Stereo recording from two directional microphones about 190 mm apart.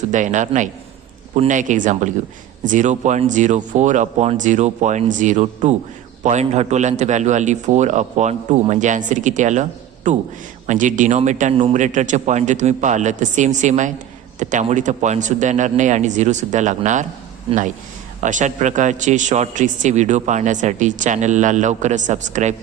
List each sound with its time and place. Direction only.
0.1 s a man's voice: 40° right (ahead or behind)
18.2 s a man's voice: 40° right (ahead or behind)